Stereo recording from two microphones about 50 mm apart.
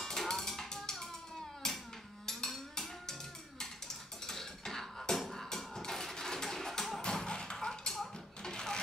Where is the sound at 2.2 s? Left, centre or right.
Centre.